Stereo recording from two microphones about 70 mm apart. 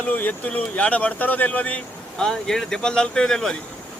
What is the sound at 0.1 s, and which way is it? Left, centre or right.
Speech, left.